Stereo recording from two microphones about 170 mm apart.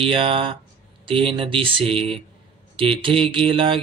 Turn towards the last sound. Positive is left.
turn(degrees=-30)  # may be behind; listen again after turning